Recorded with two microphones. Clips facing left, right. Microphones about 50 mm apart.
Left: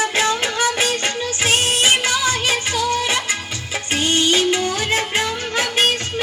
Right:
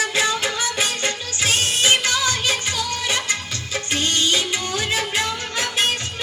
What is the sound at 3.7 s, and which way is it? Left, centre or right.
Music of bollywood, centre.